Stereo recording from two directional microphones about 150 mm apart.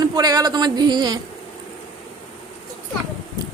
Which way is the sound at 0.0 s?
25° right (ahead or behind).